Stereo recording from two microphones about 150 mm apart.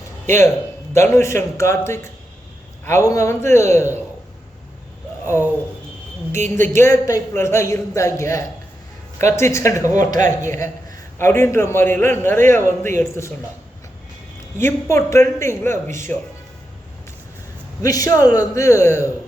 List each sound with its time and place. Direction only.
0.3 s a man's voice: 15° left (ahead or behind)
5.2 s speech: 15° left (ahead or behind)
6.6 s a man's voice: 15° left (ahead or behind)
14.6 s a man's voice: 20° left (ahead or behind)
17.8 s a man's voice: 25° left (ahead or behind)